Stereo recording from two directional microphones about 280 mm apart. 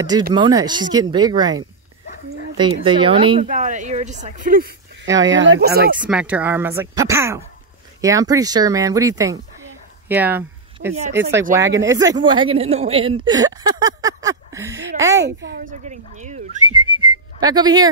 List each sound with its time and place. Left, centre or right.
0.3 s speech: centre; by 4.7 s right
5.0 s speech: centre
5.3 s speech: right
5.9 s speech: centre
10.0 s a sound: centre
11.8 s speech: centre
15.2 s speech: right; by 17.8 s centre